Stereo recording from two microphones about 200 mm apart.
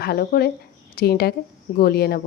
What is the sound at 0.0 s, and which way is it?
A woman's voice, 50° left (ahead or behind).